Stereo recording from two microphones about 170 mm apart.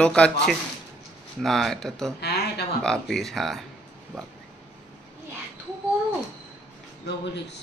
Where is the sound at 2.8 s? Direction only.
5° left (ahead or behind).